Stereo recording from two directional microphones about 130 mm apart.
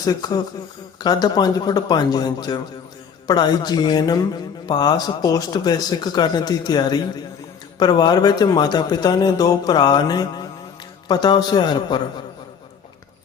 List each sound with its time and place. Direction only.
0.0 s speech: 30° left (ahead or behind)